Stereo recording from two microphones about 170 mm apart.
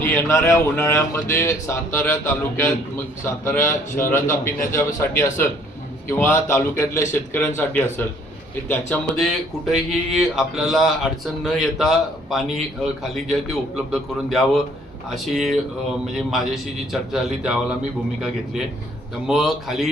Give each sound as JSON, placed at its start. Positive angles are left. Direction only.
{"t": 0.0, "sound": "speech", "side_deg": 15}
{"t": 8.9, "sound": "speech", "side_deg": 0}
{"t": 16.1, "sound": "speech", "side_deg": 0}
{"t": 19.3, "sound": "speech", "side_deg": 0}